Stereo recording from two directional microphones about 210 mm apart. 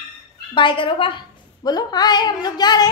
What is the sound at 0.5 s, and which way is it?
A woman's voice, 25° left (ahead or behind).